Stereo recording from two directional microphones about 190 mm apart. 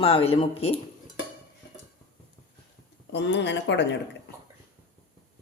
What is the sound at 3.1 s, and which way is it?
Speech, 65° left (ahead or behind).